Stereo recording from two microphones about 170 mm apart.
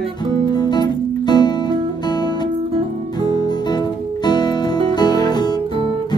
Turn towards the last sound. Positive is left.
turn(degrees=25)  # may be behind; listen again after turning